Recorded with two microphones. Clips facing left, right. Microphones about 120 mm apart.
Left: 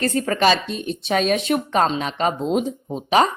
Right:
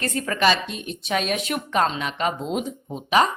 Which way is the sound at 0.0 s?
35° left (ahead or behind).